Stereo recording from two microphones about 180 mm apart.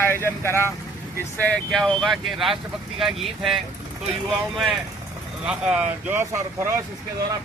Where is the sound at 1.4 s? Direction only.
5° left (ahead or behind).